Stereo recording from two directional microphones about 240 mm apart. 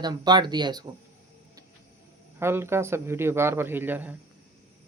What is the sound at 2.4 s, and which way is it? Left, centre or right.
Speech, centre.